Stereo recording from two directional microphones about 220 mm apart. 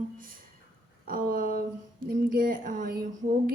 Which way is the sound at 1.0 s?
40° right (ahead or behind).